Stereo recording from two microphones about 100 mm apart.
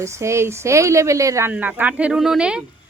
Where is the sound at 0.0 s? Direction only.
30° right (ahead or behind).